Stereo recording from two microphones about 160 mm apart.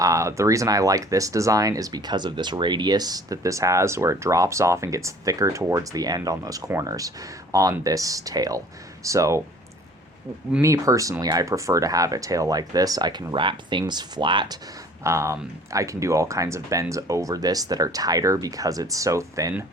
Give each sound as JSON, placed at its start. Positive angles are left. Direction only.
{"t": 0.0, "sound": "speech", "side_deg": -20}
{"t": 10.6, "sound": "speech", "side_deg": -20}